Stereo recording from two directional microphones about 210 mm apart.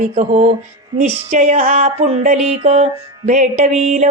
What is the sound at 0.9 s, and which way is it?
Music, 35° right (ahead or behind).